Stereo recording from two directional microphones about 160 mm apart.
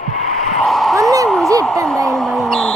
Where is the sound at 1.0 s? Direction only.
20° right (ahead or behind).